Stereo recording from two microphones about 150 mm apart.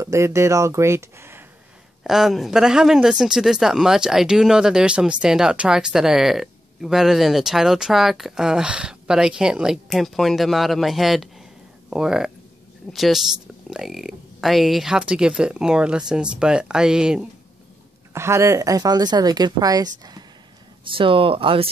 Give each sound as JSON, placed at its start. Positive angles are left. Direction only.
{"t": 0.0, "sound": "speech", "side_deg": -20}
{"t": 2.0, "sound": "speech", "side_deg": 0}
{"t": 18.1, "sound": "speech", "side_deg": -15}
{"t": 20.9, "sound": "speech", "side_deg": -35}